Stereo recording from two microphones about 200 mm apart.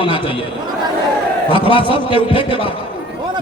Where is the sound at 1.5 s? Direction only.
25° left (ahead or behind).